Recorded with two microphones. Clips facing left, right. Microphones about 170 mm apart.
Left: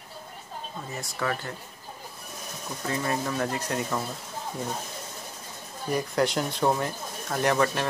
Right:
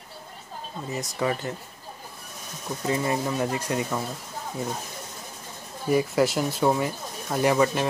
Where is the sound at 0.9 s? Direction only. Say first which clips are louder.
Right 4 dB; 20° right (ahead or behind).